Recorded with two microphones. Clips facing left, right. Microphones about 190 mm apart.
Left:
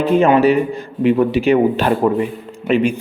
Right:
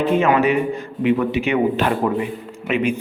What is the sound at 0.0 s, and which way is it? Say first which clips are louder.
A man's voice: left 4 dB; 30° left (ahead or behind).